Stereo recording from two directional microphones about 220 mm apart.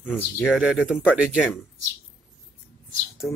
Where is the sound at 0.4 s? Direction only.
5° right (ahead or behind).